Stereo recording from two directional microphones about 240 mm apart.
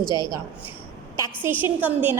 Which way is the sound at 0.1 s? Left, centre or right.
Centre.